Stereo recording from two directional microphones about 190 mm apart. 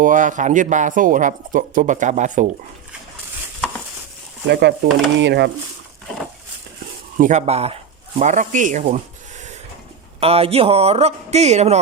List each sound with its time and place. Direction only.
0.0 s speech: 45° right (ahead or behind)
4.4 s speech: 65° right (ahead or behind)
7.2 s speech: 40° right (ahead or behind)
10.2 s speech: 30° right (ahead or behind)